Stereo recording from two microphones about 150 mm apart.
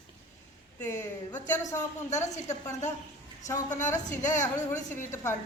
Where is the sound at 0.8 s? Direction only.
20° left (ahead or behind).